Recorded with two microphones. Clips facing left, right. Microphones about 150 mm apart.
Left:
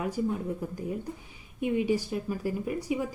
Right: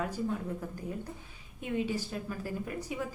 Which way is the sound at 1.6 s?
15° left (ahead or behind).